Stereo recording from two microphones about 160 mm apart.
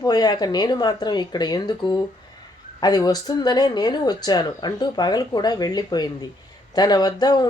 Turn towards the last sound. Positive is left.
turn(degrees=25)  # may be behind; listen again after turning